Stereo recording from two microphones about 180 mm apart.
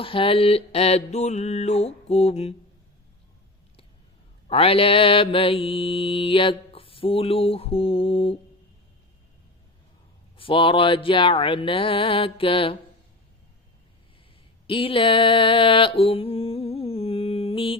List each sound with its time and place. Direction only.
0.0 s mantra: 30° left (ahead or behind)
4.4 s mantra: 30° left (ahead or behind)
10.3 s mantra: 30° left (ahead or behind)
14.7 s mantra: 30° left (ahead or behind)